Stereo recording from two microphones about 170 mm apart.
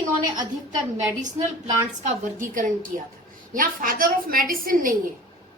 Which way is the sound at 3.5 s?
55° right (ahead or behind).